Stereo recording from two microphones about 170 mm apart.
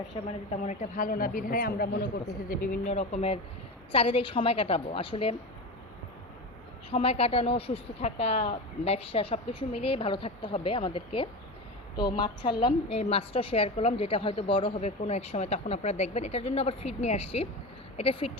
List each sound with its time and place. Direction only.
0.5 s speech: 45° left (ahead or behind); by 2.2 s 65° left (ahead or behind)
2.5 s a woman's voice: 50° left (ahead or behind); by 5.4 s 35° left (ahead or behind)
6.9 s a woman's voice: 35° left (ahead or behind)